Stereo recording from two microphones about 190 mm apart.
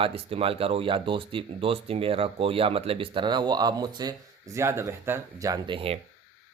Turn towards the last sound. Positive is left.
turn(degrees=-25)  # may be behind; listen again after turning